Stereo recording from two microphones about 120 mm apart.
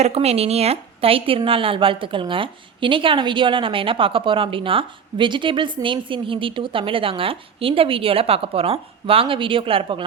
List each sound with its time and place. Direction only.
0.0 s a woman's voice: 60° right (ahead or behind)